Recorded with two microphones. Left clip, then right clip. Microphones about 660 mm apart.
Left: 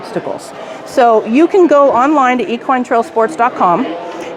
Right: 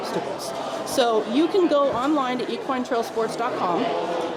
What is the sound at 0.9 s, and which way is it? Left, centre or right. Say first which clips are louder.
A woman's voice: left 12 dB; left.